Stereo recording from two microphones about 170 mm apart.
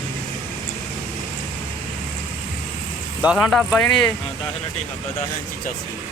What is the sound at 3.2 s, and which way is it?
Speech, 5° right (ahead or behind).